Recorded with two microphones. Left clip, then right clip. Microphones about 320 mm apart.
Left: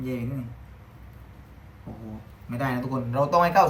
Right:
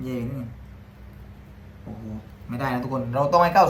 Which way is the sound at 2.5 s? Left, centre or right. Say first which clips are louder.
Right 2 dB; centre.